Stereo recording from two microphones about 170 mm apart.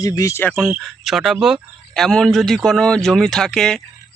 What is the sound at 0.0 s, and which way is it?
Speech, 20° left (ahead or behind).